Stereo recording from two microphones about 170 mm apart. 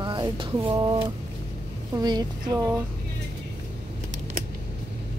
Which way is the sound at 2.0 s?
25° right (ahead or behind).